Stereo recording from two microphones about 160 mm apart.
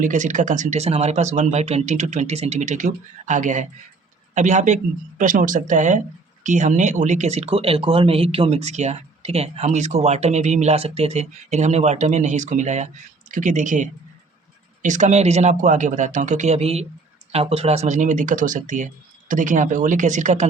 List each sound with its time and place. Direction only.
0.0 s speech: 50° right (ahead or behind)